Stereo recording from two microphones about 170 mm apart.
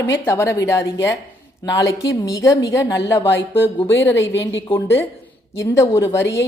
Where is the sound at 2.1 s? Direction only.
20° left (ahead or behind).